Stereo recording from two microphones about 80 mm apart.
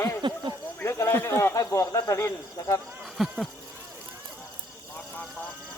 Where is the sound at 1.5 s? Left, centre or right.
Left.